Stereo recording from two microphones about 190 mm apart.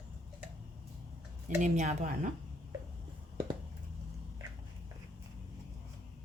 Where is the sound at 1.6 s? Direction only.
40° right (ahead or behind).